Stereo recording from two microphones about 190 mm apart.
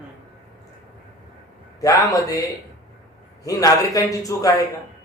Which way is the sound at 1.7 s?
15° left (ahead or behind).